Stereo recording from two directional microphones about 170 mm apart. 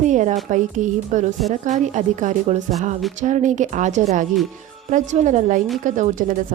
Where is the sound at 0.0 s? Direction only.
45° right (ahead or behind).